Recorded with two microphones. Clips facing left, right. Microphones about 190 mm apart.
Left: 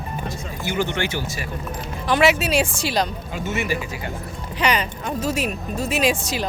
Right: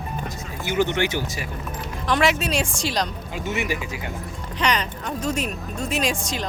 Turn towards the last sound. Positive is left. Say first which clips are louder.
# left 4 dB
turn(degrees=5)  # may be behind; listen again after turning